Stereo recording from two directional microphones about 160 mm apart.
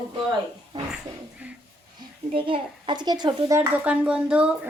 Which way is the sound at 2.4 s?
30° right (ahead or behind).